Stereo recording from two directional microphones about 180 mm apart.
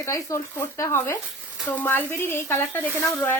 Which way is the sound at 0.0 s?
15° left (ahead or behind).